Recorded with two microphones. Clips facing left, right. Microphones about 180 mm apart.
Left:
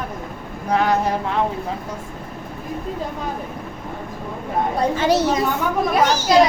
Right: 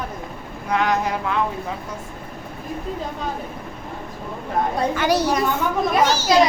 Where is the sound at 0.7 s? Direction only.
35° left (ahead or behind).